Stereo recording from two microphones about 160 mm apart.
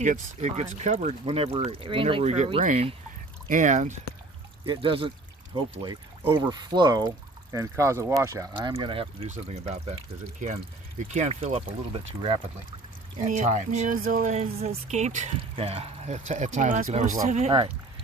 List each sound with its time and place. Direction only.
0.0 s speech: 50° right (ahead or behind)
4.6 s speech: 35° right (ahead or behind)
8.7 s speech: 35° right (ahead or behind)
11.1 s speech: 45° right (ahead or behind)
13.2 s speech: 50° right (ahead or behind)
15.5 s speech: 35° right (ahead or behind)